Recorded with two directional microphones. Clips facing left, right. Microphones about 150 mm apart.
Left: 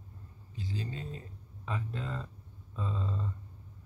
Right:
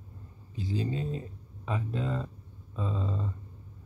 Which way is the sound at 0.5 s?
15° right (ahead or behind).